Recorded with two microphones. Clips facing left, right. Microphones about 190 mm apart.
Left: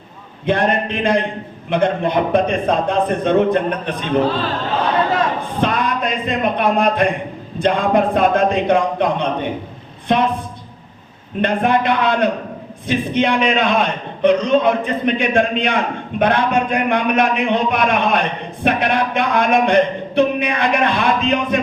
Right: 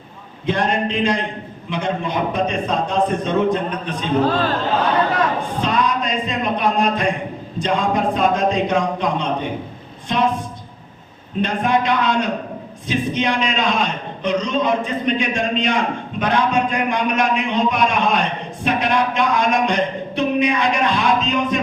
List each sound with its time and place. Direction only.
0.4 s a man's voice: 55° left (ahead or behind)
5.5 s a man's voice: 60° left (ahead or behind)
11.3 s a man's voice: 60° left (ahead or behind)